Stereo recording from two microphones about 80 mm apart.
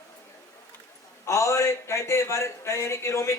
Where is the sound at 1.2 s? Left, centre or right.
Left.